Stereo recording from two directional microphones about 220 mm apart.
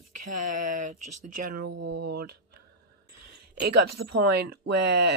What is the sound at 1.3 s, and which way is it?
Speech, 45° right (ahead or behind).